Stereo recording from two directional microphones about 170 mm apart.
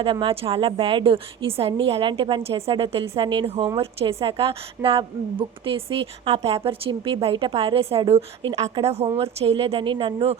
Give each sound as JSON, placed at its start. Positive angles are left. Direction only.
{"t": 0.0, "sound": "a woman's voice", "side_deg": -30}